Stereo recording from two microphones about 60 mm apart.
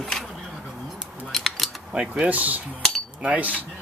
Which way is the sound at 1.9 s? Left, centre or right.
Right.